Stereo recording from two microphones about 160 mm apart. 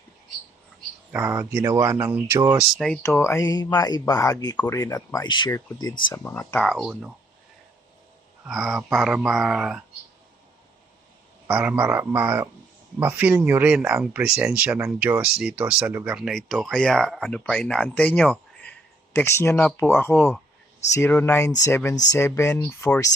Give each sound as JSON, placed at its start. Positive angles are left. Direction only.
{"t": 1.1, "sound": "speech", "side_deg": -10}
{"t": 2.8, "sound": "speech", "side_deg": 0}
{"t": 3.2, "sound": "speech", "side_deg": 15}
{"t": 5.5, "sound": "speech", "side_deg": 15}
{"t": 8.4, "sound": "speech", "side_deg": 0}
{"t": 11.4, "sound": "speech", "side_deg": -10}